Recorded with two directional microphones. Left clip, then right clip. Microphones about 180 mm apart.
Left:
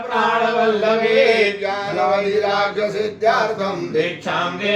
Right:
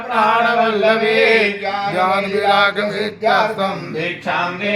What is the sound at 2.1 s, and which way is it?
Mantra, 15° right (ahead or behind).